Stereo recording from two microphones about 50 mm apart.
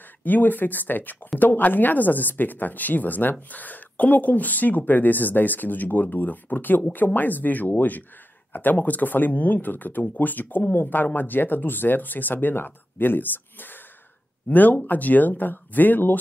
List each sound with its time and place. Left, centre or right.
0.2 s speech: left